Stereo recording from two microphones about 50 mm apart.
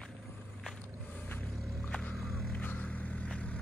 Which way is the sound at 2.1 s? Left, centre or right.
Left.